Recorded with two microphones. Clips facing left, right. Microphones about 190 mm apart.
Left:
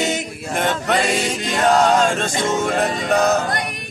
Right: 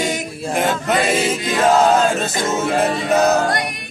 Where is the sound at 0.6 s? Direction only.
Centre (ahead or behind).